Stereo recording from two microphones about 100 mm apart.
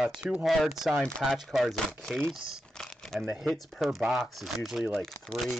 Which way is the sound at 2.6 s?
5° left (ahead or behind).